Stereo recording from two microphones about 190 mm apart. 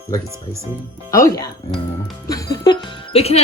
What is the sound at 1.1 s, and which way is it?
Speech, 15° left (ahead or behind).